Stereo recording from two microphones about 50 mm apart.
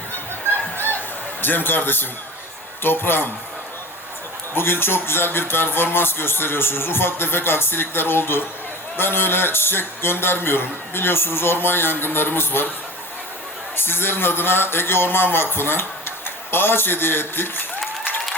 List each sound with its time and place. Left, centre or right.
0.8 s a sound: left
2.8 s speech: left
4.5 s speech: left
13.7 s speech: left